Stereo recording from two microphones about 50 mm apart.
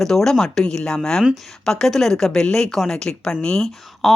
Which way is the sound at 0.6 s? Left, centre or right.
Left.